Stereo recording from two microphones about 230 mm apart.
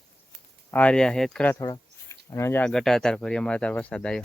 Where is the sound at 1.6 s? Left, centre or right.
Centre.